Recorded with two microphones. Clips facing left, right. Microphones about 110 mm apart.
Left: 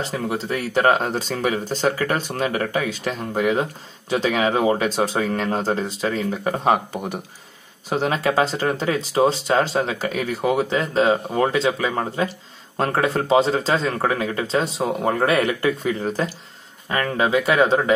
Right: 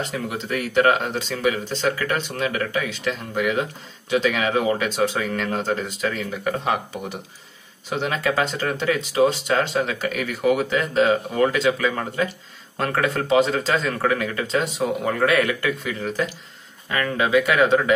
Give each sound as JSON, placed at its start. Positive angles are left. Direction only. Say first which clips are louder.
{"t": 0.0, "sound": "speech", "louder": "left 3 dB", "side_deg": 35}